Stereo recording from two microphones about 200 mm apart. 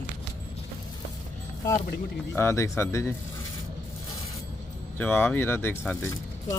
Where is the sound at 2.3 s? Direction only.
10° left (ahead or behind).